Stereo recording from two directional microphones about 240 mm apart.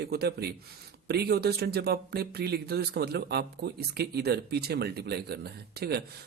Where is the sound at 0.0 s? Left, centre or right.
Right.